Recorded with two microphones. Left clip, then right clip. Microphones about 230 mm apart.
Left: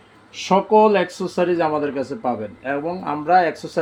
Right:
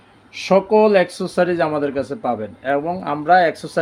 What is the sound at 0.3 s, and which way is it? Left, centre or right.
Speech, right.